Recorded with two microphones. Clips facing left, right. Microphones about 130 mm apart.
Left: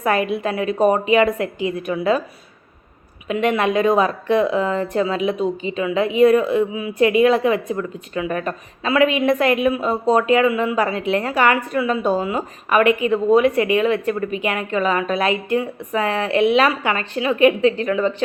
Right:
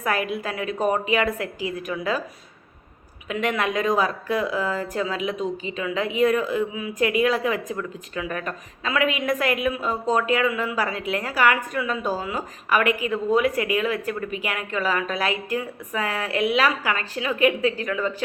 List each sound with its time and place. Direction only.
0.0 s a woman's voice: 25° left (ahead or behind)
3.2 s a woman's voice: 25° left (ahead or behind)